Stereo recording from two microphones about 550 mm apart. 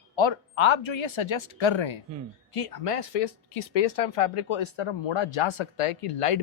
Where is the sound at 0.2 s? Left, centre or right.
Left.